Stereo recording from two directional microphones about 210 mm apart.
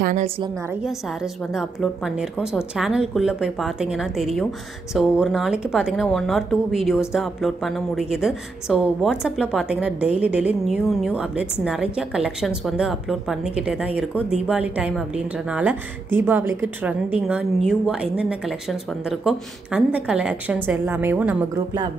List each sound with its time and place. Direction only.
0.0 s a woman's voice: 35° right (ahead or behind)
0.8 s a woman's voice: centre (ahead or behind)